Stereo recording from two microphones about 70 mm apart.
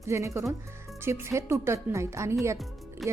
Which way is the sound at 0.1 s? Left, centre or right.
Right.